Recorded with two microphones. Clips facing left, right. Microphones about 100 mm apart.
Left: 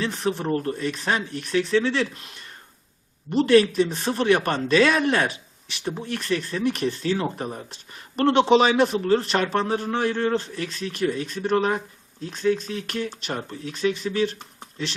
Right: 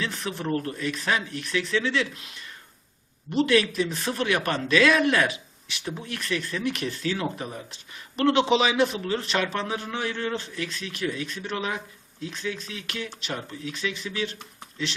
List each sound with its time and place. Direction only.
0.0 s speech: 35° left (ahead or behind)